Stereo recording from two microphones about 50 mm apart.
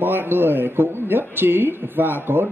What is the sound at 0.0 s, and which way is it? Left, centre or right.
A man's voice, right.